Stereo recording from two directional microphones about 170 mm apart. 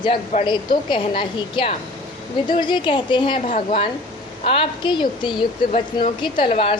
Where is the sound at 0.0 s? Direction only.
30° left (ahead or behind).